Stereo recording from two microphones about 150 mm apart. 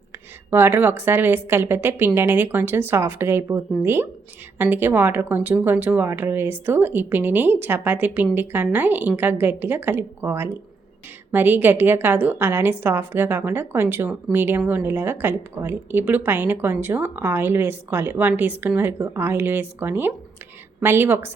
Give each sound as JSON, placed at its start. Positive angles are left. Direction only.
{"t": 0.5, "sound": "a woman's voice", "side_deg": -15}